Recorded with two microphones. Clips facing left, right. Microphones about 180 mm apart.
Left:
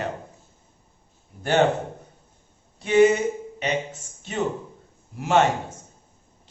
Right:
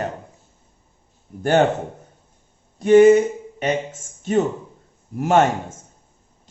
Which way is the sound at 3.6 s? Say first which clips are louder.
Right 5 dB; 45° right (ahead or behind).